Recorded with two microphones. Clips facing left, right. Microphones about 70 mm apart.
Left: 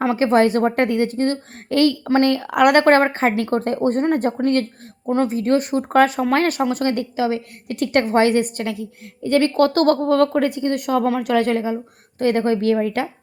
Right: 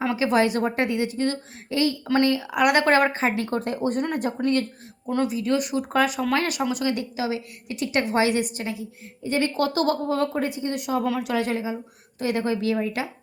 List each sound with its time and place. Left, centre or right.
0.0 s a woman's voice: left